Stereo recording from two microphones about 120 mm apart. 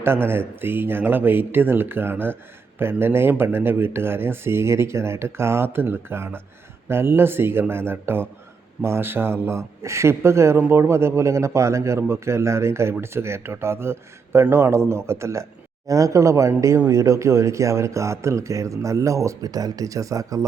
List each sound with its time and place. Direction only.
0.0 s speech: 20° right (ahead or behind)